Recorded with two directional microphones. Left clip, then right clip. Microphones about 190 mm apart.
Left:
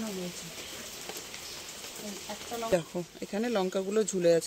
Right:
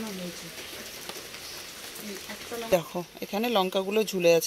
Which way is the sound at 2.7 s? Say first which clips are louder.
Right 5 dB; 5° left (ahead or behind).